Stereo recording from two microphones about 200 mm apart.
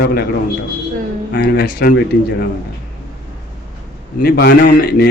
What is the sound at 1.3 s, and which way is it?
Speech, 55° left (ahead or behind).